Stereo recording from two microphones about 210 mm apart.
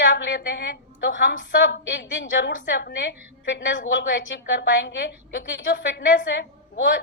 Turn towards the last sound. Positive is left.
turn(degrees=55)  # may be behind; listen again after turning